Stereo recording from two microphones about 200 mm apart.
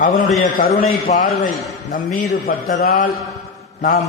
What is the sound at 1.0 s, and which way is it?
A man's voice, 40° left (ahead or behind).